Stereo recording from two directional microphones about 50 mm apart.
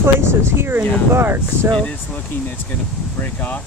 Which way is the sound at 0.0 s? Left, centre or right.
Right.